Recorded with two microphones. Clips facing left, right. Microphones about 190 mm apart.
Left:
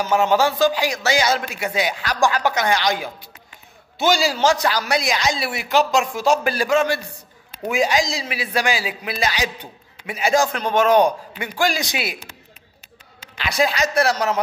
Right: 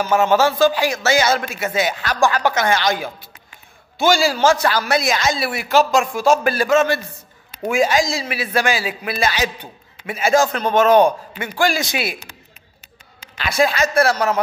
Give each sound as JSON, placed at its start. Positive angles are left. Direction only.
{"t": 0.0, "sound": "a woman's voice", "side_deg": 15}
{"t": 4.3, "sound": "a woman's voice", "side_deg": 15}
{"t": 9.0, "sound": "a man's voice", "side_deg": -55}
{"t": 10.0, "sound": "a woman's voice", "side_deg": 15}
{"t": 13.7, "sound": "a woman's voice", "side_deg": 15}